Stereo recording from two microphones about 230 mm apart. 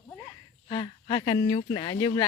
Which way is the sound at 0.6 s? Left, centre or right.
Centre.